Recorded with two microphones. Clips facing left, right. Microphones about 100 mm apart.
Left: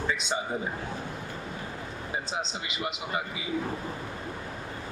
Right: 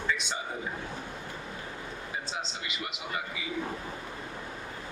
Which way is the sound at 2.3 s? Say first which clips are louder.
Left 3 dB; 25° left (ahead or behind).